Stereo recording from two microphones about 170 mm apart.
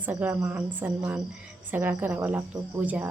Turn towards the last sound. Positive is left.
turn(degrees=-10)  # may be behind; listen again after turning